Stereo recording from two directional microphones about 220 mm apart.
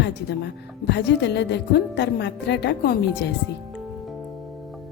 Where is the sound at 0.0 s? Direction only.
50° left (ahead or behind).